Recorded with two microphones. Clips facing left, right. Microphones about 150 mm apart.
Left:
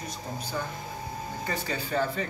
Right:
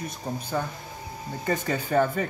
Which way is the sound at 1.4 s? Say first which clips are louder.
Right 7 dB; 45° right (ahead or behind).